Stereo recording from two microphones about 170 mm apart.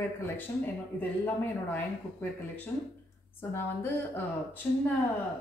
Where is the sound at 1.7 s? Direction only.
10° left (ahead or behind).